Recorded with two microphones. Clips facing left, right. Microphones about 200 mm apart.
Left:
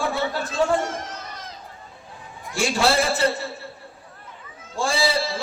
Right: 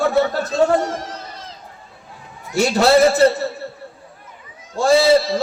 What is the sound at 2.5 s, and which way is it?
Speech, 40° right (ahead or behind).